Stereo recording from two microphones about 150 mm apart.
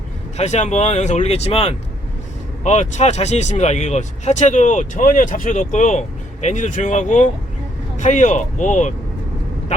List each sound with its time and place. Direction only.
0.3 s speech: 50° left (ahead or behind)